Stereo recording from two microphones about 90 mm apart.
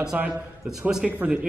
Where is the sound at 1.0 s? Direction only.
15° right (ahead or behind).